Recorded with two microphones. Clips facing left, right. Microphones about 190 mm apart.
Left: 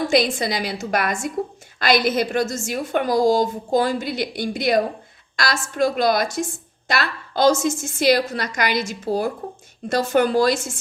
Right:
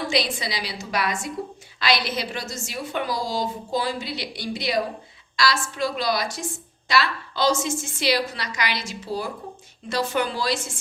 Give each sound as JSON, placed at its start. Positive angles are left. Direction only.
{"t": 0.1, "sound": "a woman's voice", "side_deg": 50}